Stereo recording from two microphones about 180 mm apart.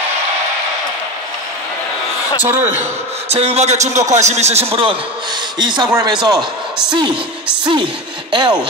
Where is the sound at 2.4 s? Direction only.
10° right (ahead or behind).